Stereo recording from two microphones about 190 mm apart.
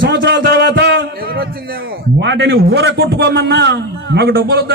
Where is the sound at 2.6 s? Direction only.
60° right (ahead or behind).